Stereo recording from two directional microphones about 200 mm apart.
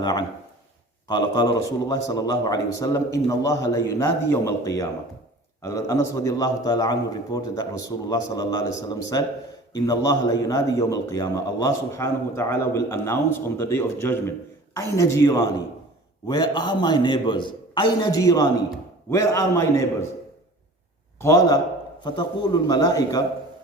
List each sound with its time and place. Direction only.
0.0 s a man's voice: 20° left (ahead or behind)
21.2 s a man's voice: 15° left (ahead or behind)